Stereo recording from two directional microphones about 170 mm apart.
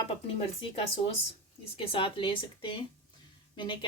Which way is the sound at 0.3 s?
35° left (ahead or behind).